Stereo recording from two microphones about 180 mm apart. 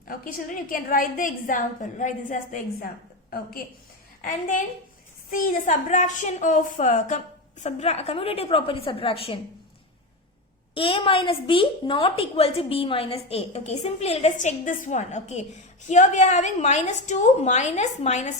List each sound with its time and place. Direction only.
0.1 s a woman's voice: 50° left (ahead or behind)
4.2 s a woman's voice: 50° left (ahead or behind); by 9.4 s 30° left (ahead or behind)
10.8 s a woman's voice: 30° left (ahead or behind)